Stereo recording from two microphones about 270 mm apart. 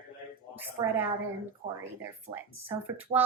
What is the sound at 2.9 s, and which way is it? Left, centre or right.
Speech, centre.